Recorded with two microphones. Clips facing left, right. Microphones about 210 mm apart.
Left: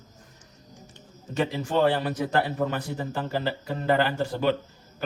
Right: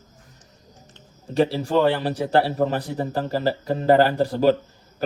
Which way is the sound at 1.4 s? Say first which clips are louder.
Right 5 dB; 35° right (ahead or behind).